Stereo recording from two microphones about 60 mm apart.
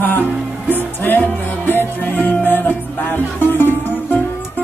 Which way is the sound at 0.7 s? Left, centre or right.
Left.